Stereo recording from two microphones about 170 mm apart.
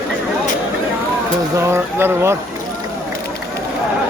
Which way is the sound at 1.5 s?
15° right (ahead or behind).